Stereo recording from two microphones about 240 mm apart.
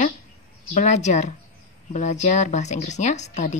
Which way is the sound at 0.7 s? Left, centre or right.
Left.